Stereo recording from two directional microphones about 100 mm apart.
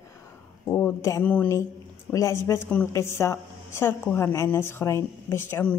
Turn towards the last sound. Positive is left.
turn(degrees=25)  # may be behind; listen again after turning